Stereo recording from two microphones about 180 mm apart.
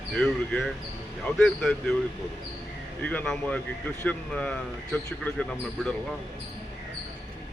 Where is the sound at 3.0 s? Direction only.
10° left (ahead or behind).